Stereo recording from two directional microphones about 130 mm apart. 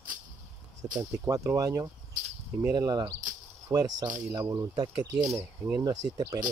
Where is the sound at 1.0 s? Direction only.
25° right (ahead or behind).